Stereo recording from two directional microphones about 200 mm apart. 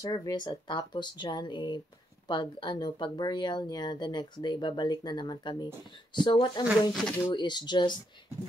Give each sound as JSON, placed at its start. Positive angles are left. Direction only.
{"t": 0.0, "sound": "speech", "side_deg": 20}